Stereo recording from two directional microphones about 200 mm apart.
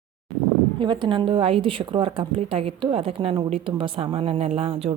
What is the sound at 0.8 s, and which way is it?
A woman's voice, 25° right (ahead or behind).